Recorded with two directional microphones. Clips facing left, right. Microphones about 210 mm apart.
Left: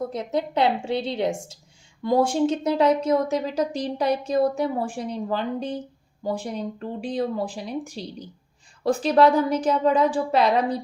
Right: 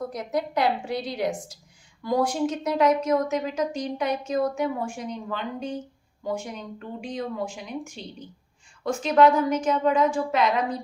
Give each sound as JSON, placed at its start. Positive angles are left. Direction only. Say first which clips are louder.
{"t": 0.1, "sound": "a woman's voice", "louder": "left 2 dB", "side_deg": 25}